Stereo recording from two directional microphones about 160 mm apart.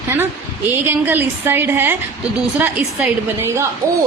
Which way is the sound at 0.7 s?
10° right (ahead or behind).